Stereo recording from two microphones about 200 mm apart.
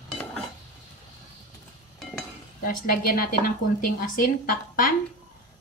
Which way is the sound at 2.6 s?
45° left (ahead or behind).